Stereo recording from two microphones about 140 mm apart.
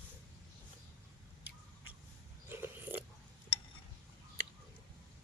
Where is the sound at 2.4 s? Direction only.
15° right (ahead or behind).